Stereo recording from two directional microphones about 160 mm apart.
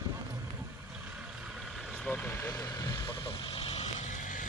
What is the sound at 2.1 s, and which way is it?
Vehicle, 10° left (ahead or behind).